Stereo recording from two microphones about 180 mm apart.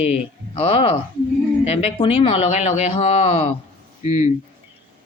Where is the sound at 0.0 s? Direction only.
35° left (ahead or behind).